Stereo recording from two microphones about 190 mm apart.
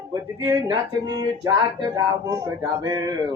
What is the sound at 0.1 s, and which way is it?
Speech, 20° right (ahead or behind).